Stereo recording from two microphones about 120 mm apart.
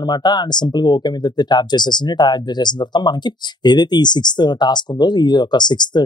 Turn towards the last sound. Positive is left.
turn(degrees=35)  # may be behind; listen again after turning